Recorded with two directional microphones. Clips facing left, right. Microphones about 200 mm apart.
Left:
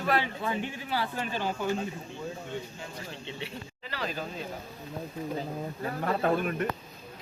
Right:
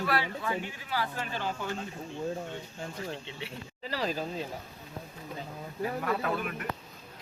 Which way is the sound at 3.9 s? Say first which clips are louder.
Right 3 dB; 35° right (ahead or behind).